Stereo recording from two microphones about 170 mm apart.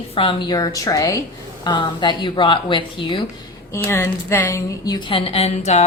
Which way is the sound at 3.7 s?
15° left (ahead or behind).